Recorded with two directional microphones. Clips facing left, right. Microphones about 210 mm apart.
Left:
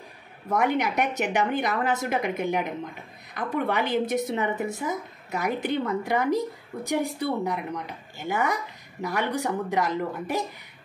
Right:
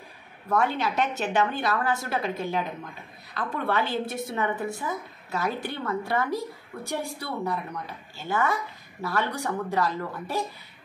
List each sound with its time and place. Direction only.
0.5 s a woman's voice: 15° left (ahead or behind)